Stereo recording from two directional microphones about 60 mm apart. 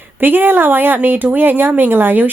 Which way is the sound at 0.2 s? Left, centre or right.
Right.